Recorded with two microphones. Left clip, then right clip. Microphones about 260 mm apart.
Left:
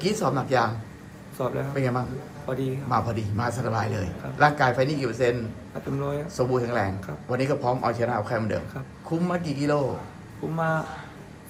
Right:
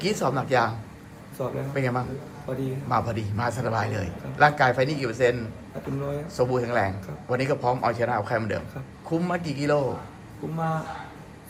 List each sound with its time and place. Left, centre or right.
0.0 s a man's voice: centre